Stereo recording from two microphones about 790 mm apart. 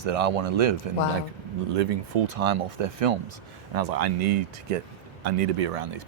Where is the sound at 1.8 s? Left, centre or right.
Right.